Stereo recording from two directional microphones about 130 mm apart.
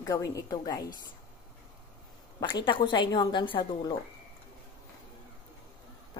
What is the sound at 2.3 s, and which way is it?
A woman's voice, 35° left (ahead or behind).